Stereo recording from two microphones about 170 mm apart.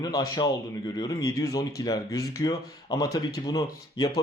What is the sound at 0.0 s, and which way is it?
Speech, 25° left (ahead or behind).